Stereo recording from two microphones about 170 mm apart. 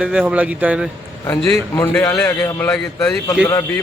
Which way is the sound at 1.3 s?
5° left (ahead or behind).